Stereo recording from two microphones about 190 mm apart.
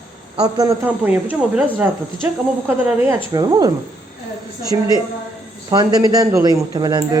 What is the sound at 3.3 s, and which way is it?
Speech, 20° right (ahead or behind).